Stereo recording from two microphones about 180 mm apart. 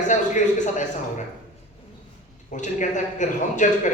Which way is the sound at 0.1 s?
45° left (ahead or behind).